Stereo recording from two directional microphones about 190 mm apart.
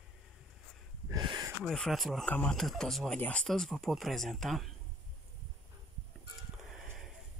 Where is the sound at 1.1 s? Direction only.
20° right (ahead or behind).